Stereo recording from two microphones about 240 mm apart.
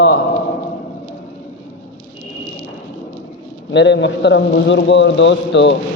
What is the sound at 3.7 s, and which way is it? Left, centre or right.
Mantra, left.